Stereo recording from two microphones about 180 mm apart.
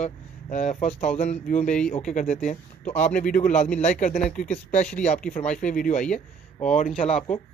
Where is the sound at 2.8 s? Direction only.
10° left (ahead or behind).